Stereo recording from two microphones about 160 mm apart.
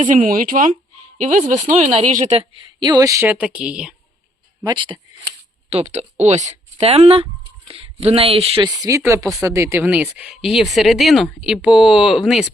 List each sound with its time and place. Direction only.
0.1 s speech: 60° right (ahead or behind)
2.8 s speech: 25° right (ahead or behind); by 3.9 s 5° right (ahead or behind)
4.6 s speech: 30° right (ahead or behind)
5.7 s speech: 45° right (ahead or behind)
8.7 s speech: 20° right (ahead or behind); by 12.5 s centre (ahead or behind)